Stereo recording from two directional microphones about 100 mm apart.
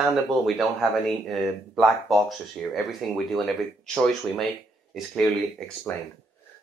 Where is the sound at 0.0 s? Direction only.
Centre (ahead or behind).